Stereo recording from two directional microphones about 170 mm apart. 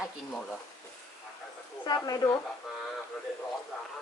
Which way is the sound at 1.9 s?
20° left (ahead or behind).